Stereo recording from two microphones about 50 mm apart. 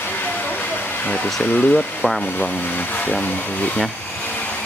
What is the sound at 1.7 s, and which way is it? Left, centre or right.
Speech, centre.